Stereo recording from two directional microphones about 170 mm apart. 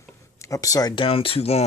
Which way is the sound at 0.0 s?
20° left (ahead or behind).